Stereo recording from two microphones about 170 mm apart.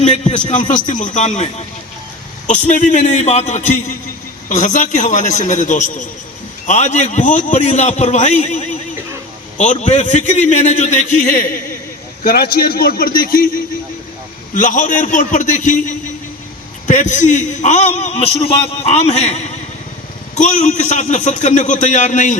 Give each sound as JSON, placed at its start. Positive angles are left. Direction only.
{"t": 0.0, "sound": "a man's voice", "side_deg": 45}
{"t": 2.5, "sound": "a man's voice", "side_deg": 45}
{"t": 14.5, "sound": "a man's voice", "side_deg": 50}